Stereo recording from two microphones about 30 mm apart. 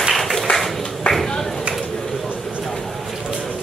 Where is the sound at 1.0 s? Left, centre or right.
Left.